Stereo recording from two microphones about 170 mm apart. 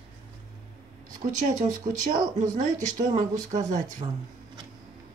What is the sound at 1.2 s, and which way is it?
Speech, 45° right (ahead or behind).